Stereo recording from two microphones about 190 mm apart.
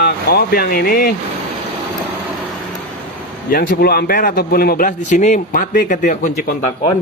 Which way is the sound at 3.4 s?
55° left (ahead or behind).